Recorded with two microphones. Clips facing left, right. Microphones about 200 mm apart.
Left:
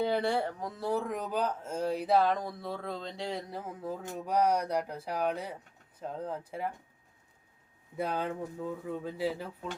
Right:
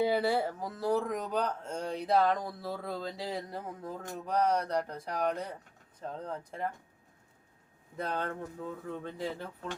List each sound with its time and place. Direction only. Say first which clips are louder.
0.0 s speech: right 1 dB; 5° right (ahead or behind)
7.9 s speech: left 2 dB; 10° left (ahead or behind)